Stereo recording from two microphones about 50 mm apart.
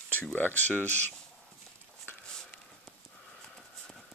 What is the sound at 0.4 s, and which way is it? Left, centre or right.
Speech, left.